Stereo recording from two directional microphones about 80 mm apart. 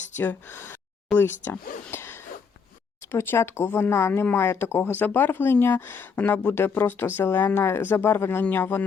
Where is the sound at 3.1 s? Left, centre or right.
Left.